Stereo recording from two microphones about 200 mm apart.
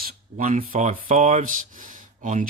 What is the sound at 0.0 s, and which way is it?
Speech, 40° right (ahead or behind).